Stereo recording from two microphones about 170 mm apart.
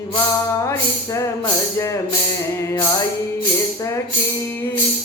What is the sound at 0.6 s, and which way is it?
Music, 20° left (ahead or behind).